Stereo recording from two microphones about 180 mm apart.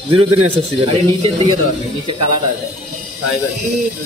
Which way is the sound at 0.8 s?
30° right (ahead or behind).